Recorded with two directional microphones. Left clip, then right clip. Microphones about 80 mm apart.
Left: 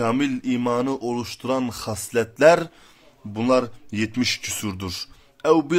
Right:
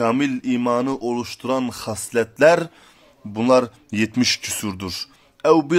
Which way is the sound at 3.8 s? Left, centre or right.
Right.